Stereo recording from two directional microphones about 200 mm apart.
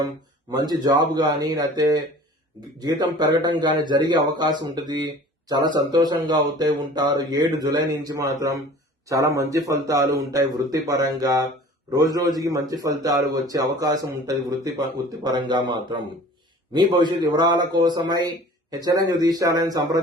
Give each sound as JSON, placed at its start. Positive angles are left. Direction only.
{"t": 0.7, "sound": "a man's voice", "side_deg": -20}